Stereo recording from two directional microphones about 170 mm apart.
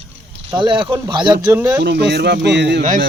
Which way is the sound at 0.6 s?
30° right (ahead or behind).